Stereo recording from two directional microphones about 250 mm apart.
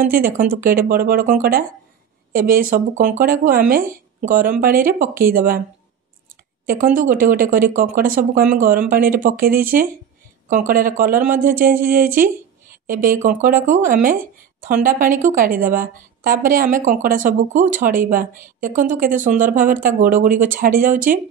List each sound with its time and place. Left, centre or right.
0.0 s a woman's voice: right
6.6 s a woman's voice: right